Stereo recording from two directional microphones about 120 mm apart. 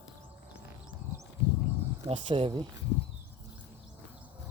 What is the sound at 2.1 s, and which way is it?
Speech, 45° right (ahead or behind).